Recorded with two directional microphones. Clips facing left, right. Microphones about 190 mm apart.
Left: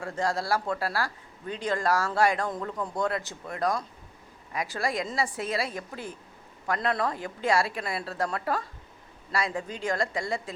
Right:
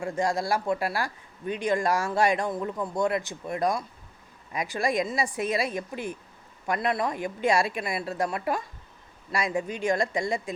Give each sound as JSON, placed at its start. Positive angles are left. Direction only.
{"t": 0.0, "sound": "speech", "side_deg": -15}